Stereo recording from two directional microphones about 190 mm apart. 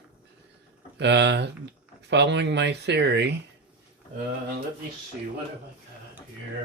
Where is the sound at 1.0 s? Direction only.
65° right (ahead or behind).